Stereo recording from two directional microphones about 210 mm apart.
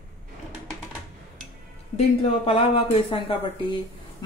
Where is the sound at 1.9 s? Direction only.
30° left (ahead or behind).